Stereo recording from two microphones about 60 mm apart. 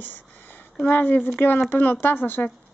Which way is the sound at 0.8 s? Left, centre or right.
Left.